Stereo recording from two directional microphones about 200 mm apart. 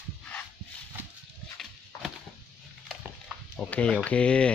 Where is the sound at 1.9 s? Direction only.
15° left (ahead or behind).